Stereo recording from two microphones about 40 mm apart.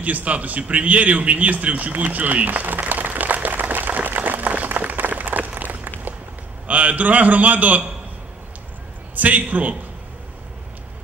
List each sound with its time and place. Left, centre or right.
0.0 s a sound: right
6.7 s a man's voice: right
9.1 s a man's voice: right